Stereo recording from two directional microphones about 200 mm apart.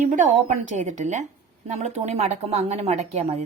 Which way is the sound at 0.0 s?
40° right (ahead or behind).